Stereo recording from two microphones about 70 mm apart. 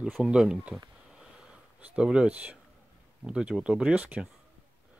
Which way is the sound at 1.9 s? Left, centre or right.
Centre.